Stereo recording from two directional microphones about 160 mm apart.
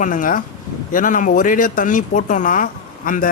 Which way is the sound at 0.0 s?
55° left (ahead or behind).